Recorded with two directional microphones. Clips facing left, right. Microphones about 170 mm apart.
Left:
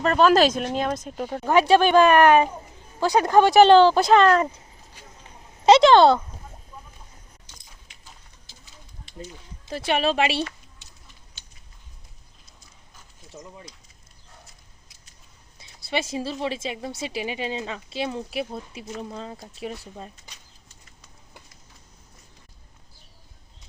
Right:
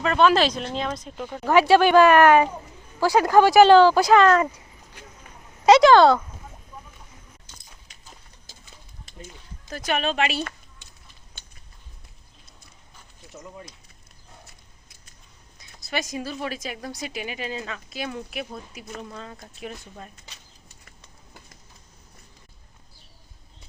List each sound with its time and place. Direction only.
0.0 s speech: 40° left (ahead or behind)
1.5 s speech: 20° left (ahead or behind)
5.2 s a sound: 25° left (ahead or behind)
7.9 s a sound: 40° right (ahead or behind)
9.6 s speech: 30° left (ahead or behind)
14.4 s horse: 55° right (ahead or behind)
15.5 s speech: 30° left (ahead or behind)